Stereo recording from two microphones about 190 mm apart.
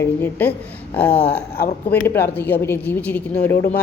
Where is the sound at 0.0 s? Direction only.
10° left (ahead or behind).